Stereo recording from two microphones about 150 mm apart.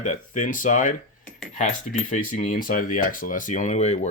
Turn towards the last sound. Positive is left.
turn(degrees=50)  # may be behind; listen again after turning